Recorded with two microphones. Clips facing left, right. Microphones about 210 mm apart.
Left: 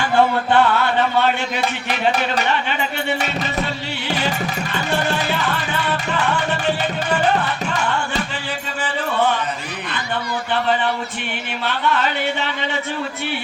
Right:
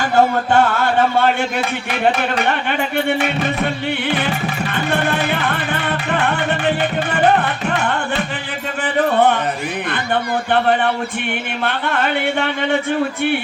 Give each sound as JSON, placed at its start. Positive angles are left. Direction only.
{"t": 0.0, "sound": "speech", "side_deg": -45}
{"t": 2.4, "sound": "speech", "side_deg": -55}
{"t": 4.7, "sound": "music", "side_deg": -55}
{"t": 8.8, "sound": "music", "side_deg": -55}
{"t": 11.6, "sound": "speech", "side_deg": -55}